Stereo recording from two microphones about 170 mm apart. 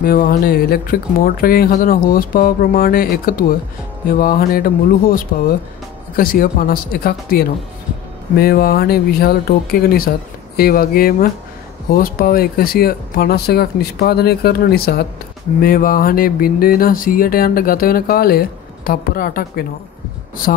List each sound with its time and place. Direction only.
0.0 s speech: 60° left (ahead or behind)